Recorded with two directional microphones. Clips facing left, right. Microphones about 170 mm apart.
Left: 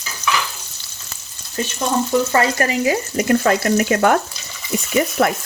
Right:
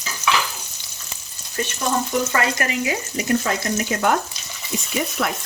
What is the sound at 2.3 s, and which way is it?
Frying, 35° left (ahead or behind).